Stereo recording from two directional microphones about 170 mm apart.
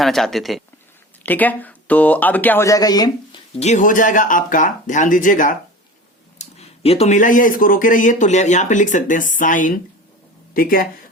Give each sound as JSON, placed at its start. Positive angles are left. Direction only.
{"t": 0.0, "sound": "speech", "side_deg": 0}
{"t": 3.5, "sound": "speech", "side_deg": 40}
{"t": 6.4, "sound": "speech", "side_deg": 35}